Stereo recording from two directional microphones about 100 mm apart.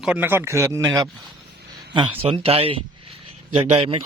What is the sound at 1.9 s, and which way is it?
Speech, 55° right (ahead or behind).